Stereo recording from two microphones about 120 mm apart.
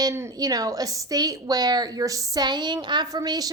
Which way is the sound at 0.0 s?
25° right (ahead or behind).